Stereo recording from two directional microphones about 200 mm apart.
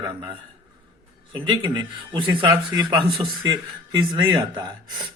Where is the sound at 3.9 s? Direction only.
20° right (ahead or behind).